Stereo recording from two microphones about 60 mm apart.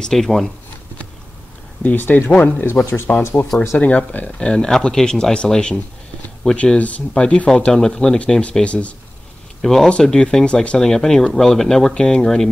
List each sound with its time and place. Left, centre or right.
0.0 s speech: centre
1.8 s speech: left
2.8 s speech: centre
3.2 s speech: left
3.7 s speech: left
4.4 s speech: centre
8.2 s speech: left
9.6 s speech: centre